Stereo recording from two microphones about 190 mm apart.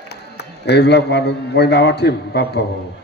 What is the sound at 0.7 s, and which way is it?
Mantra, 60° left (ahead or behind).